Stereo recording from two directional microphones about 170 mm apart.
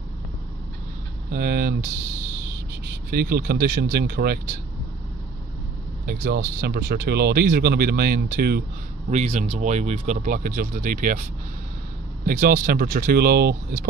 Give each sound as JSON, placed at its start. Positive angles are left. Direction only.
{"t": 1.3, "sound": "speech", "side_deg": -60}
{"t": 2.9, "sound": "speech", "side_deg": -65}
{"t": 6.0, "sound": "speech", "side_deg": -60}
{"t": 9.1, "sound": "speech", "side_deg": -40}
{"t": 12.3, "sound": "speech", "side_deg": -55}